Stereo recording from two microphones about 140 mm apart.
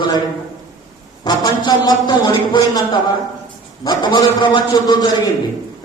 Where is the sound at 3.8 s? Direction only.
30° left (ahead or behind).